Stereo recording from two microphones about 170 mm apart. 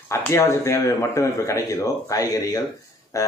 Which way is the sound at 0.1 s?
15° left (ahead or behind).